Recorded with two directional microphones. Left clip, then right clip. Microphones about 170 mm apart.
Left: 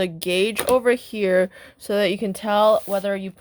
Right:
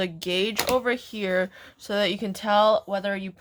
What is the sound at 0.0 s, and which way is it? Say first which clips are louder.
Speech: left 5 dB; 45° left (ahead or behind).